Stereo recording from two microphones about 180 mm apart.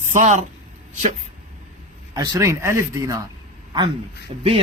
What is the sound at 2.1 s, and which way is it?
Speech, 20° right (ahead or behind).